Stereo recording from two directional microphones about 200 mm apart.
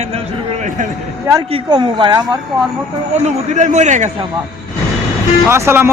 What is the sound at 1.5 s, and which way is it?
Speech, 25° right (ahead or behind).